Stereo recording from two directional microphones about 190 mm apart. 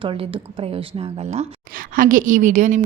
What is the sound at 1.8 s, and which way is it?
A woman's voice, 45° right (ahead or behind).